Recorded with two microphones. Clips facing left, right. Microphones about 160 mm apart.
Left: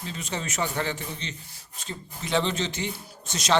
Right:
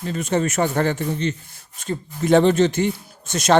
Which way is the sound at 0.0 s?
50° right (ahead or behind).